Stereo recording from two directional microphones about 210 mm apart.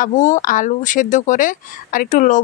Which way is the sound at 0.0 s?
35° left (ahead or behind).